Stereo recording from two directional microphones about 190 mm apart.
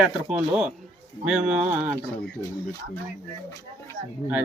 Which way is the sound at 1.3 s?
5° right (ahead or behind).